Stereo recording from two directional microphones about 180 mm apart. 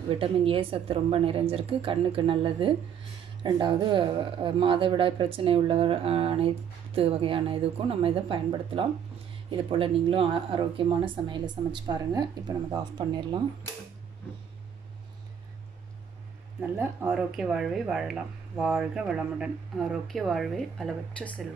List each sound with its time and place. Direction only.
0.1 s a woman's voice: 30° right (ahead or behind)
16.7 s speech: 10° right (ahead or behind)